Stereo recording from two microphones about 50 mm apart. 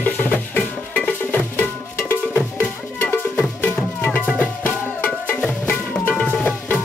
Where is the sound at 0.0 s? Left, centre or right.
Left.